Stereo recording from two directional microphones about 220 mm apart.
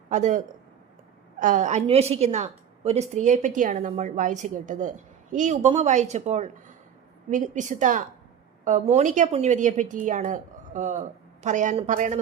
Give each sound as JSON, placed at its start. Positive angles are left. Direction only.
{"t": 0.1, "sound": "a woman's voice", "side_deg": -35}